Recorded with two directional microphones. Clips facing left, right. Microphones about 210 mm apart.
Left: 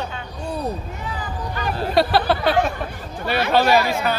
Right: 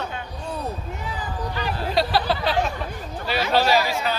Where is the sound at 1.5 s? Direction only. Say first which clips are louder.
Left 5 dB; 55° left (ahead or behind).